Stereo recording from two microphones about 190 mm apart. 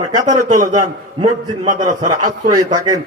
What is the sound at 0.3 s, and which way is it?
A man's voice, 40° right (ahead or behind).